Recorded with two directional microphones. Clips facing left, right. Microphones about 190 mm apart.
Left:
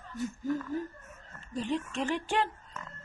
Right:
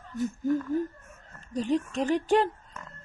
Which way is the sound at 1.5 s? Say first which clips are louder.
Right 5 dB; 40° right (ahead or behind).